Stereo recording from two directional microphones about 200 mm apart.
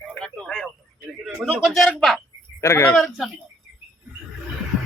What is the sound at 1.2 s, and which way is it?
Speech, 5° right (ahead or behind).